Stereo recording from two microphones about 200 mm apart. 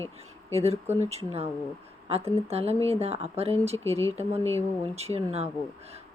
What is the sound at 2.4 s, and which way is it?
Speech, 30° right (ahead or behind).